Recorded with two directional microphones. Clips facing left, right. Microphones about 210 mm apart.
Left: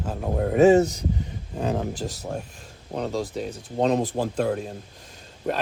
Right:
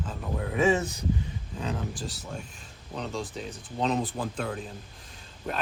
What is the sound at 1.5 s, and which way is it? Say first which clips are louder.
Speech: left 8 dB; 60° left (ahead or behind).